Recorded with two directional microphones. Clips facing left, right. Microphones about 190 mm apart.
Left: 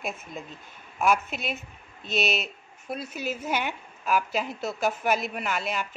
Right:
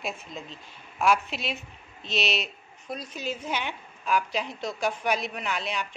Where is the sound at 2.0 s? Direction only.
55° left (ahead or behind).